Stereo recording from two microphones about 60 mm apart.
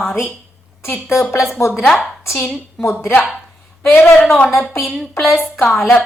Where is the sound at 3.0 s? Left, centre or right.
Left.